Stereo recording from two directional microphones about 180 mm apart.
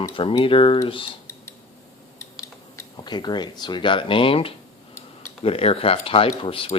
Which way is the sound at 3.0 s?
25° left (ahead or behind).